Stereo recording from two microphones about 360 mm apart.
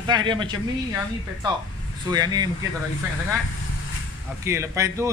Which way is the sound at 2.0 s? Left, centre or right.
Centre.